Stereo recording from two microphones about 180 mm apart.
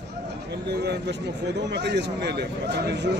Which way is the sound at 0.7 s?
70° right (ahead or behind).